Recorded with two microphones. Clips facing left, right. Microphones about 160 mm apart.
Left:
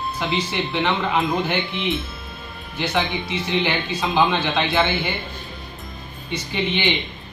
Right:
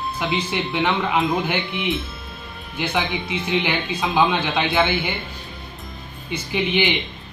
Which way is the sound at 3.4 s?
10° right (ahead or behind).